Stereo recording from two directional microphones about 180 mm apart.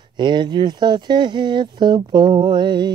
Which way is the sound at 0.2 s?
25° right (ahead or behind).